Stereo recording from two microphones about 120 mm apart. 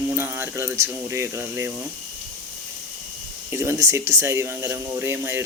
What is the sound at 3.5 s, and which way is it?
Speech, 20° right (ahead or behind).